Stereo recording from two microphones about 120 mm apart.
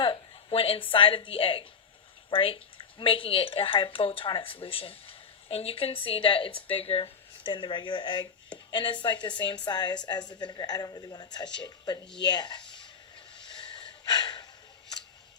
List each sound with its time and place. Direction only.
0.0 s a woman's voice: 45° left (ahead or behind)
13.3 s snort: 40° left (ahead or behind)